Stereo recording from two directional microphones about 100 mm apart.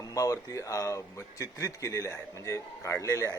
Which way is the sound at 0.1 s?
35° left (ahead or behind).